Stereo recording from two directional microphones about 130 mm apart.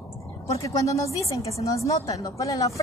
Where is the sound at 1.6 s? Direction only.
25° left (ahead or behind).